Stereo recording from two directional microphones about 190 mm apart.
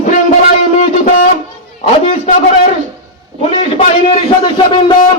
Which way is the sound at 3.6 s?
35° left (ahead or behind).